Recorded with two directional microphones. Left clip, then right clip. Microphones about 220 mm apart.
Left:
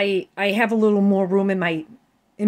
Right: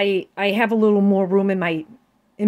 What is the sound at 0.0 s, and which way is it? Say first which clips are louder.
Speech: right 1 dB; 5° right (ahead or behind).